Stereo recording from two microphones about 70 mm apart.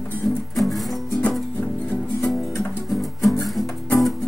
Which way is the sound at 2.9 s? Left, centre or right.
Centre.